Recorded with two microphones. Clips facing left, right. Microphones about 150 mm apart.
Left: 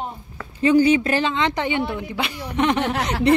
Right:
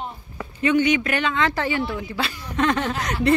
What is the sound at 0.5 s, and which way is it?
Speech, 30° left (ahead or behind).